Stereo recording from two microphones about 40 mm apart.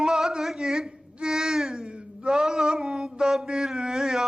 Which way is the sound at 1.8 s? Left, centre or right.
Right.